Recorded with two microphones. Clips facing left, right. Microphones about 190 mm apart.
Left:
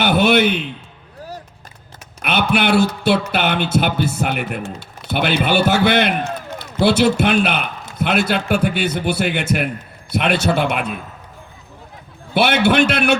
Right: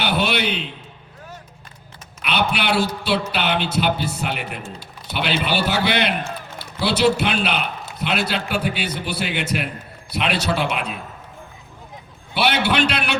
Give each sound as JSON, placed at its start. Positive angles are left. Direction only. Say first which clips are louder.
{"t": 0.0, "sound": "a sound", "louder": "left 7 dB", "side_deg": 50}
{"t": 2.2, "sound": "a man's voice", "louder": "left 4 dB", "side_deg": 50}
{"t": 12.3, "sound": "a man's voice", "louder": "left 5 dB", "side_deg": 50}